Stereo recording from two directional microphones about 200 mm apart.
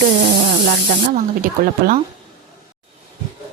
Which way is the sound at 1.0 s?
40° right (ahead or behind).